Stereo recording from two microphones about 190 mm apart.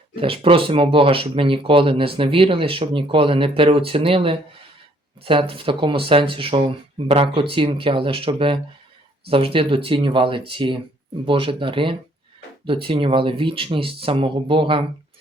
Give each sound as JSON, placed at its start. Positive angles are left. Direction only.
{"t": 0.2, "sound": "speech", "side_deg": -30}